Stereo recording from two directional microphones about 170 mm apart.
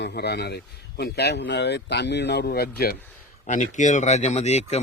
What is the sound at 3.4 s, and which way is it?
Speech, 45° left (ahead or behind).